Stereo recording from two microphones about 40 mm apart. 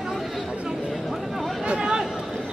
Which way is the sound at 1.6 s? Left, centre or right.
Right.